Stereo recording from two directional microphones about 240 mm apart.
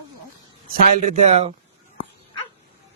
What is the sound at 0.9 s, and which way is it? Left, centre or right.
Speech, right.